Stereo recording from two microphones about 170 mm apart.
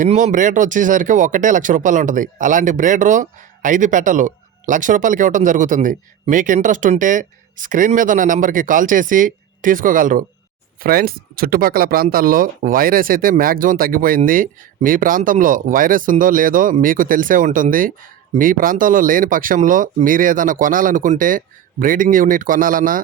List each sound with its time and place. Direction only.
0.0 s speech: 45° right (ahead or behind)